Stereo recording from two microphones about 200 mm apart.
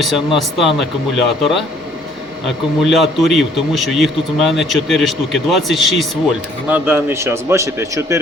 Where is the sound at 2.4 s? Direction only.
Centre (ahead or behind).